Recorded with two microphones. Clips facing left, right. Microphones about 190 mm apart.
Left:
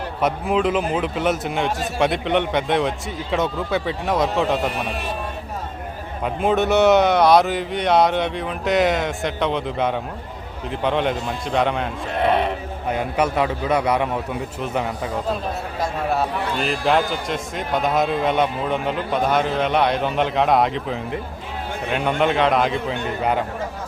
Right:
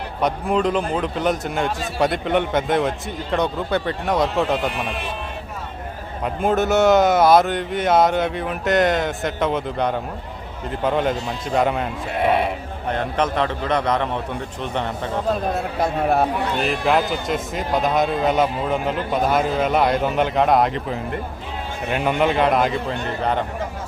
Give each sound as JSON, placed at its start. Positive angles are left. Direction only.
{"t": 0.2, "sound": "a man's voice", "side_deg": 0}
{"t": 4.7, "sound": "a man's voice", "side_deg": 40}
{"t": 6.2, "sound": "a man's voice", "side_deg": 0}
{"t": 12.9, "sound": "a man's voice", "side_deg": 10}
{"t": 15.8, "sound": "speech", "side_deg": -55}
{"t": 16.6, "sound": "a man's voice", "side_deg": 0}